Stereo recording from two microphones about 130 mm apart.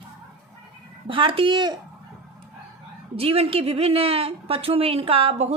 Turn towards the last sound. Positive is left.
turn(degrees=-50)  # may be behind; listen again after turning